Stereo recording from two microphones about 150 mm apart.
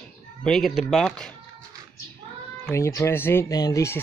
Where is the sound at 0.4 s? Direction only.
Centre (ahead or behind).